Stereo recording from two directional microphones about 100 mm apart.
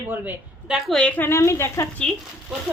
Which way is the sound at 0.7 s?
5° right (ahead or behind).